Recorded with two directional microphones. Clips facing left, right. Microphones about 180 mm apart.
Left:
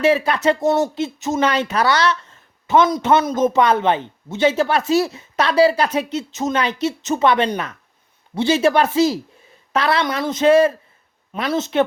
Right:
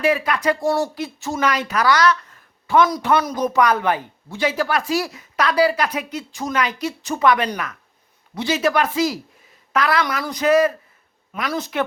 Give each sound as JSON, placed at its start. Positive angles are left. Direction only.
{"t": 0.0, "sound": "speech", "side_deg": 25}